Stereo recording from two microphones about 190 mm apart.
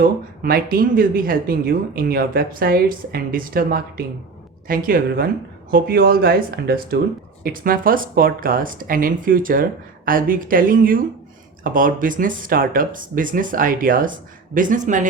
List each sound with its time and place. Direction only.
0.0 s speech: 50° right (ahead or behind)